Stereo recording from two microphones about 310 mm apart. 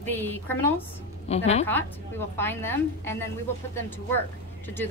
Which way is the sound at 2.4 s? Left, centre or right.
Centre.